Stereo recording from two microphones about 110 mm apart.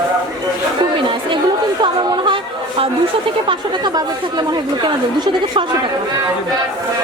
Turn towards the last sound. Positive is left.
turn(degrees=-45)  # may be behind; listen again after turning